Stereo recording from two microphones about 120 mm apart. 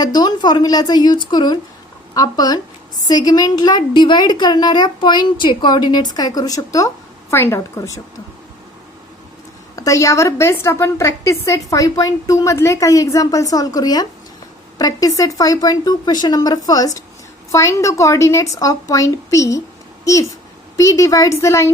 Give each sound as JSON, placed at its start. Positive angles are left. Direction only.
{"t": 0.0, "sound": "a woman's voice", "side_deg": 35}
{"t": 9.7, "sound": "a woman's voice", "side_deg": 25}
{"t": 20.7, "sound": "a woman's voice", "side_deg": 25}